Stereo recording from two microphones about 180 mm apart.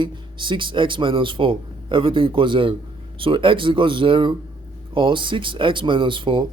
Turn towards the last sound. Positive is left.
turn(degrees=-25)  # may be behind; listen again after turning